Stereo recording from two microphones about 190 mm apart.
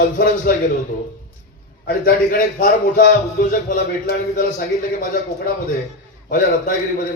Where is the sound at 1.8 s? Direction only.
50° left (ahead or behind).